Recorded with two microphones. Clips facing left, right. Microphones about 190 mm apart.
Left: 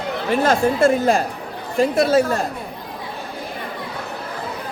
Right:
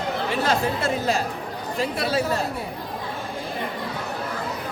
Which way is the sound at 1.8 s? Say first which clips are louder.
Left 9 dB; 45° left (ahead or behind).